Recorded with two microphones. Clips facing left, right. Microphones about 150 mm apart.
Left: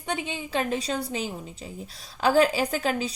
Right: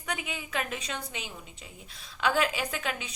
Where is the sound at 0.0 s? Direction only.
30° left (ahead or behind).